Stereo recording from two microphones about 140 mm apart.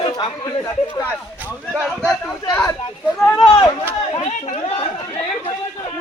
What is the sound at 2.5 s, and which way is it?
Speech, 30° left (ahead or behind).